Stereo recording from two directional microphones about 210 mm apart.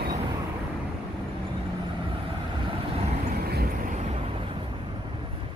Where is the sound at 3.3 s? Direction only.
50° right (ahead or behind).